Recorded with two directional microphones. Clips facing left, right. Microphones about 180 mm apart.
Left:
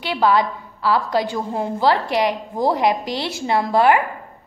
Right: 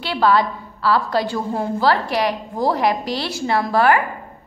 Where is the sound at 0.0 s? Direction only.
15° left (ahead or behind).